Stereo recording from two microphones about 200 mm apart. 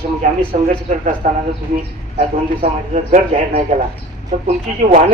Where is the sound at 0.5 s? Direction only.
40° right (ahead or behind).